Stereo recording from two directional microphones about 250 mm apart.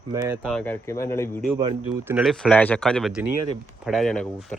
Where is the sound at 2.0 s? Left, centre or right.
Centre.